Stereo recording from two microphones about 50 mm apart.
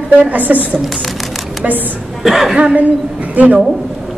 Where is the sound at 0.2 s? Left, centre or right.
Right.